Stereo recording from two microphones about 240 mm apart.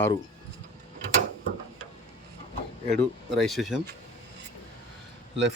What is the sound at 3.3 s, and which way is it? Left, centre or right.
Speech, centre.